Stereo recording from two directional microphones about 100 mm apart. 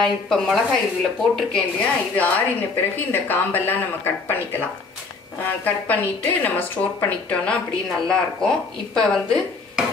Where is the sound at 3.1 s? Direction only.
20° left (ahead or behind).